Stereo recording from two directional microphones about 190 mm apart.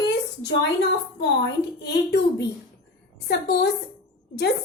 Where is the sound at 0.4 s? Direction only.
65° left (ahead or behind).